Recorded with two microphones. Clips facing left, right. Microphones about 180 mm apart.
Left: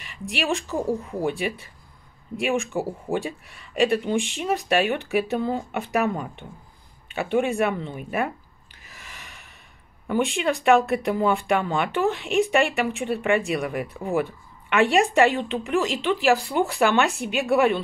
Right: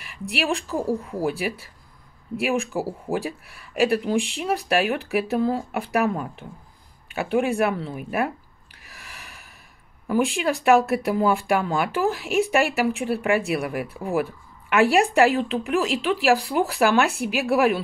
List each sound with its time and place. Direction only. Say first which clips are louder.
0.6 s speech: even; centre (ahead or behind)
9.0 s snort: right 1 dB; centre (ahead or behind)
10.0 s speech: right 1 dB; centre (ahead or behind)